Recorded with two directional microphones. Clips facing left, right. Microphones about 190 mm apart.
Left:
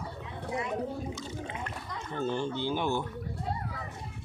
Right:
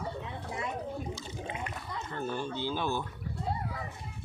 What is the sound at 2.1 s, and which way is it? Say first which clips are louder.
Speech: left 4 dB; 20° left (ahead or behind).